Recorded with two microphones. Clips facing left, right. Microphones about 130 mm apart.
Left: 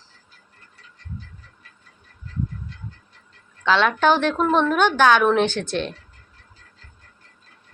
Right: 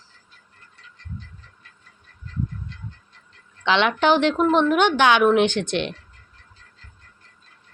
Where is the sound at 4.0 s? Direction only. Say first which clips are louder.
Right 1 dB; 15° right (ahead or behind).